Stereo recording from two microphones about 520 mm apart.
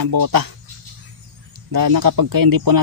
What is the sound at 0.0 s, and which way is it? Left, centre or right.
Speech, right.